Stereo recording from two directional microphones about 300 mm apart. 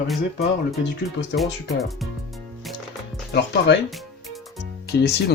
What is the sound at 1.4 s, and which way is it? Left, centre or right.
Speech, centre.